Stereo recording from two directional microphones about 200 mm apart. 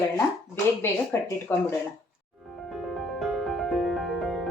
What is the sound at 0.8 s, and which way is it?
Speech, 10° left (ahead or behind).